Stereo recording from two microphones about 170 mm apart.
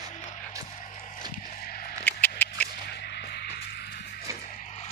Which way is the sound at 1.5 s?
60° left (ahead or behind).